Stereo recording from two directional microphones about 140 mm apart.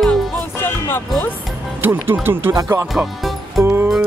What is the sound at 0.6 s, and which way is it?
Music, 15° left (ahead or behind).